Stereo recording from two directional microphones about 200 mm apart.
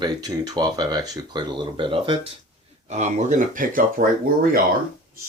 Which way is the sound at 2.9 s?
35° right (ahead or behind).